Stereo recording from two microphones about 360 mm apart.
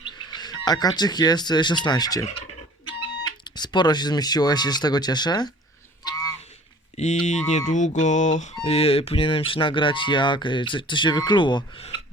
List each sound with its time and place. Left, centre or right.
0.3 s speech: centre
3.4 s speech: centre
6.9 s a sound: centre
8.6 s speech: centre